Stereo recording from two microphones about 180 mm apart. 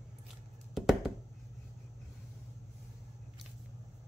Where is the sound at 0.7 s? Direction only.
Centre (ahead or behind).